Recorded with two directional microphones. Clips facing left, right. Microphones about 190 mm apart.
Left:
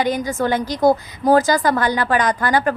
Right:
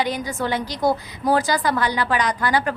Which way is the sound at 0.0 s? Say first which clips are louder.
Left 4 dB; 45° left (ahead or behind).